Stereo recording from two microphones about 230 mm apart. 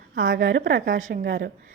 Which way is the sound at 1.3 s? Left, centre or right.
Right.